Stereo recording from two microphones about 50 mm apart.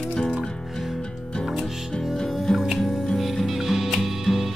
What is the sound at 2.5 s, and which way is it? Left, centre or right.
Music, centre.